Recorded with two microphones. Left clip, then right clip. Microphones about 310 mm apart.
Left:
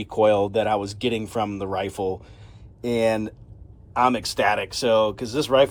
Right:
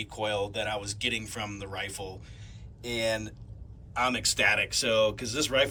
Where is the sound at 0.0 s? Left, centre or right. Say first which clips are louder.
Left 12 dB; centre.